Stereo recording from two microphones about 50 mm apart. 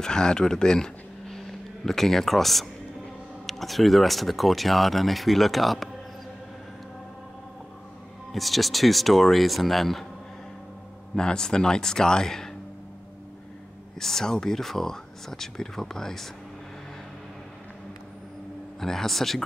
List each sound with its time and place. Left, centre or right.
0.0 s speech: centre
8.3 s speech: centre
11.1 s speech: centre
13.9 s speech: centre
18.8 s speech: centre